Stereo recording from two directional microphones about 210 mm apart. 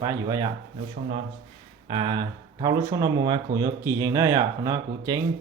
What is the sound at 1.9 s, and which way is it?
Speech, 20° right (ahead or behind).